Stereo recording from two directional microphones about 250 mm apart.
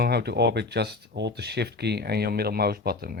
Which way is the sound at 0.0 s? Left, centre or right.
Right.